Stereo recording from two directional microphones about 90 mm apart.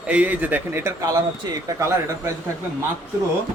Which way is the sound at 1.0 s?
40° right (ahead or behind).